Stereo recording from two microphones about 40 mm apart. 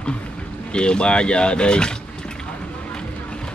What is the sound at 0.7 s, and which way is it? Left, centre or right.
Speech, left.